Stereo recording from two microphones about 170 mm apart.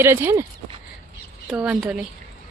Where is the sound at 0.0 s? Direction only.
15° right (ahead or behind).